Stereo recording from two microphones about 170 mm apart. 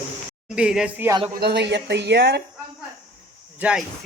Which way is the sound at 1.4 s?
80° right.